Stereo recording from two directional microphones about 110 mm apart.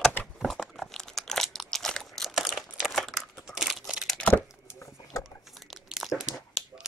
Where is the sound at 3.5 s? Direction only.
Centre (ahead or behind).